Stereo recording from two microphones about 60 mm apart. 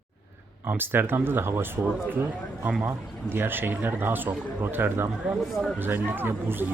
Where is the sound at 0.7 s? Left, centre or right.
Right.